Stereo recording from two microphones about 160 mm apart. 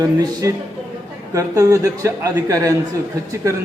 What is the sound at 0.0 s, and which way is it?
A man's voice, 25° right (ahead or behind).